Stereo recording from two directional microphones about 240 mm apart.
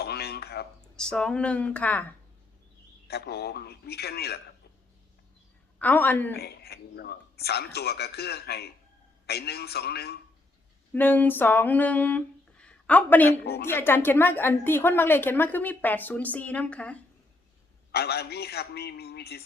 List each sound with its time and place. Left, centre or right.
0.0 s a sound: left
0.9 s speech: centre
3.1 s speech: left
5.8 s a woman's voice: centre
6.3 s speech: left
10.9 s a sound: centre
13.7 s a woman's voice: centre
17.9 s speech: left